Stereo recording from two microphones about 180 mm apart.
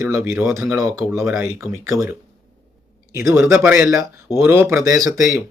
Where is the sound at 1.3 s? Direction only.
5° right (ahead or behind).